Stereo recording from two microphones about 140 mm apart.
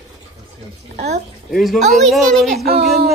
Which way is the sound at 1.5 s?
Centre (ahead or behind).